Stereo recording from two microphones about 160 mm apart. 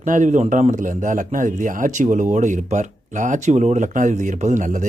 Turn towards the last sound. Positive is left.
turn(degrees=-50)  # may be behind; listen again after turning